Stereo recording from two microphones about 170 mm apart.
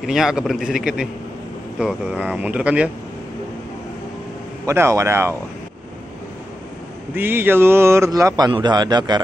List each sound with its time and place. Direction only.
0.0 s a man's voice: centre (ahead or behind)
4.6 s speech: 15° right (ahead or behind)
7.2 s speech: 10° right (ahead or behind)